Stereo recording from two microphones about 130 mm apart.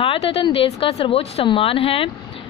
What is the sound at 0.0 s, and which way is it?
Speech, 45° left (ahead or behind).